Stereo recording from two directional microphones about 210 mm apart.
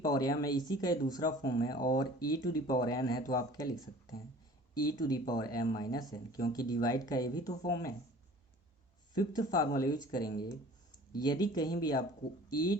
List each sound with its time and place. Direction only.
0.0 s speech: 20° left (ahead or behind)
9.1 s speech: 20° left (ahead or behind)